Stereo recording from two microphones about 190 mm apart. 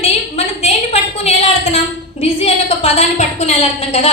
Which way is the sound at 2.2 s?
35° left (ahead or behind).